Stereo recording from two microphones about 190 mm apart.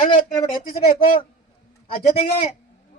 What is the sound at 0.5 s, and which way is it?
Speech, 45° left (ahead or behind).